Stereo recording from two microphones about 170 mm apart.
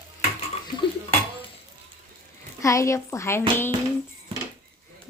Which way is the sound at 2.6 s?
15° left (ahead or behind).